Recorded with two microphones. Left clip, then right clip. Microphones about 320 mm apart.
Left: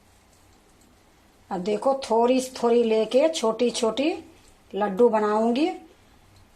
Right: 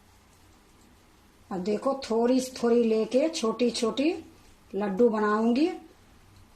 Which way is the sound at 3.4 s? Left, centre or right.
Left.